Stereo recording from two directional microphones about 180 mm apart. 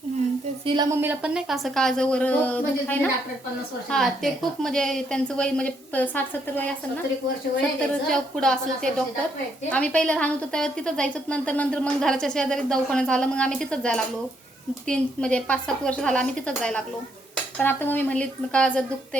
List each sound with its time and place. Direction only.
0.6 s speech: 25° right (ahead or behind)
1.0 s a woman's voice: 5° right (ahead or behind)
8.1 s a woman's voice: 5° left (ahead or behind)